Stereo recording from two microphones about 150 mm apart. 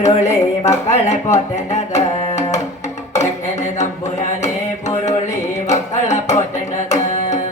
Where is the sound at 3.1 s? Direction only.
55° left (ahead or behind).